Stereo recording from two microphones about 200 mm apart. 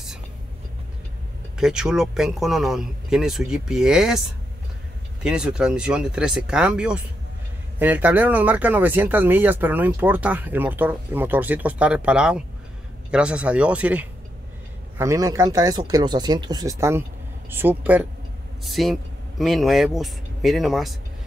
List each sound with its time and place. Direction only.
1.6 s speech: 5° right (ahead or behind)
5.2 s speech: 5° right (ahead or behind)